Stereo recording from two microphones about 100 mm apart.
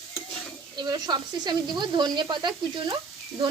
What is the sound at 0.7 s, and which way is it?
Speech, 45° right (ahead or behind).